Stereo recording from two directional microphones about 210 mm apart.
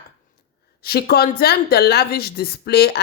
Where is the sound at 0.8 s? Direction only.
45° left (ahead or behind).